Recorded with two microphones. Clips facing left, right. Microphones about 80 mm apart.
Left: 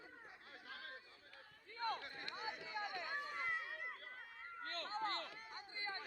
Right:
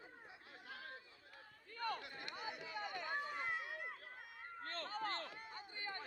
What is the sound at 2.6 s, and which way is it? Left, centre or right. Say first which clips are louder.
Run: left 1 dB; left.